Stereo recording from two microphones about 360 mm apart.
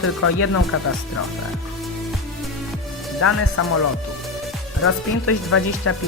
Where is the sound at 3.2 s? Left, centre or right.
Left.